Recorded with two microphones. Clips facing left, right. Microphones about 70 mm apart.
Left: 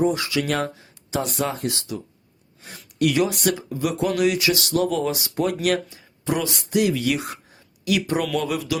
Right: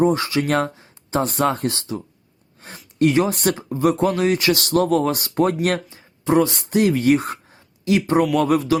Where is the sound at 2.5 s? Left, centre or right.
Right.